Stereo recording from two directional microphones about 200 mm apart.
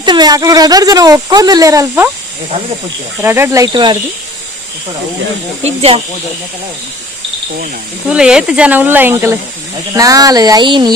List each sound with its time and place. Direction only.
0.0 s speech: 20° right (ahead or behind)
3.2 s speech: 10° right (ahead or behind)
5.6 s speech: 30° right (ahead or behind)
8.1 s speech: 5° right (ahead or behind); by 10.9 s 25° right (ahead or behind)